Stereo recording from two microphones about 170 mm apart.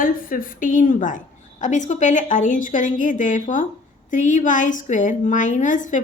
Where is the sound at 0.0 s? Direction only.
55° left (ahead or behind).